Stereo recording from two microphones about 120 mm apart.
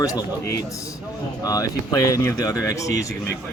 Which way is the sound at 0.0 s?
30° left (ahead or behind).